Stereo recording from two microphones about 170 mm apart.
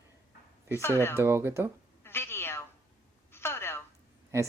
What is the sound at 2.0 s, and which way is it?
Cat, 15° left (ahead or behind).